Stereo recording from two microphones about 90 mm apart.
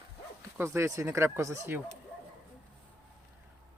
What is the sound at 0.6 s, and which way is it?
Speech, 30° right (ahead or behind).